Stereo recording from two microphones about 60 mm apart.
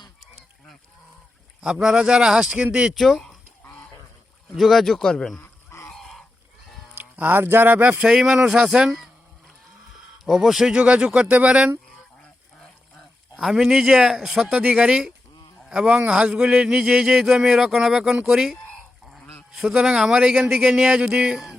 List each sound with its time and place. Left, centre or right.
1.6 s speech: centre
2.9 s speech: centre
4.5 s speech: centre
5.4 s honk: left
5.9 s a sound: centre
6.9 s speech: right
7.9 s speech: right
8.1 s speech: centre
10.2 s speech: centre; by 11.5 s right
12.2 s duck: centre
13.4 s speech: centre
14.6 s speech: centre